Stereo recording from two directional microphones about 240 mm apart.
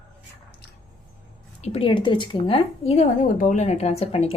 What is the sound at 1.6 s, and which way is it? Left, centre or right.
A woman's voice, left.